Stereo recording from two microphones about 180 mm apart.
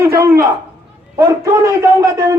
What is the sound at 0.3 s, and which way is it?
A man's voice, 15° right (ahead or behind).